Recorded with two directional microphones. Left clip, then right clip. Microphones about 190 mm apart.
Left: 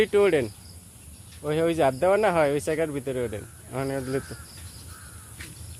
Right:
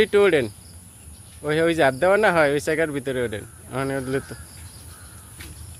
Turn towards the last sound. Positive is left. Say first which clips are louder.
# right 3 dB
turn(degrees=-15)  # may be behind; listen again after turning